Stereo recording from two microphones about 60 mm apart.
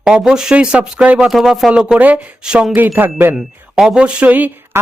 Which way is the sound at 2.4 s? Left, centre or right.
Centre.